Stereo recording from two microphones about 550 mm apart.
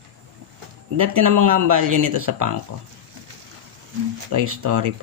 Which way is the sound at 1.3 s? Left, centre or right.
Right.